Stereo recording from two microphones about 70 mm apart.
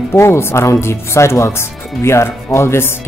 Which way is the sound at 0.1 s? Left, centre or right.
Left.